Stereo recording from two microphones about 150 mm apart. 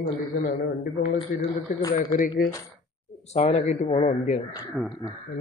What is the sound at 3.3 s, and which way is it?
A man's voice, 45° left (ahead or behind).